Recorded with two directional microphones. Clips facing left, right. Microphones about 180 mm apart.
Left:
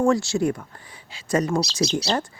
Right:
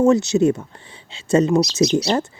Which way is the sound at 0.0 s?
20° right (ahead or behind).